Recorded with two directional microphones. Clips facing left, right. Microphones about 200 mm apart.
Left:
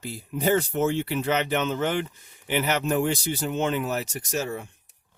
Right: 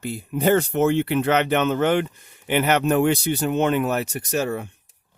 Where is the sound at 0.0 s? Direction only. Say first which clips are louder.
Right 5 dB; 55° right (ahead or behind).